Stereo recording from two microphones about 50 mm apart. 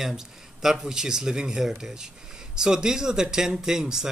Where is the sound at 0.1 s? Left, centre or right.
Centre.